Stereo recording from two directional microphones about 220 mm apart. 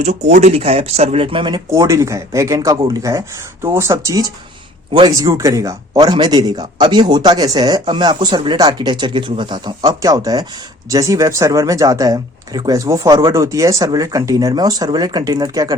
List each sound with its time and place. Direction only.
0.0 s a man's voice: 30° right (ahead or behind)